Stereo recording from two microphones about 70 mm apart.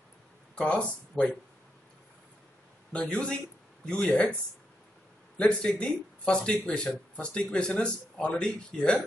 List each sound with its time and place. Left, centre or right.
0.6 s speech: centre
2.9 s speech: centre
5.4 s speech: centre